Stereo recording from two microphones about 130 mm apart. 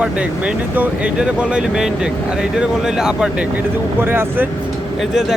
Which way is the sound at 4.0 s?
15° right (ahead or behind).